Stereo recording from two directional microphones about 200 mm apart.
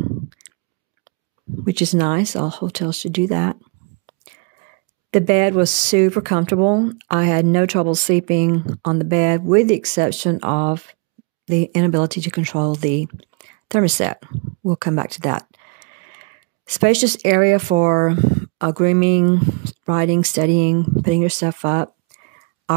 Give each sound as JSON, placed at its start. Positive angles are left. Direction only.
{"t": 1.7, "sound": "speech", "side_deg": -35}
{"t": 5.1, "sound": "speech", "side_deg": -35}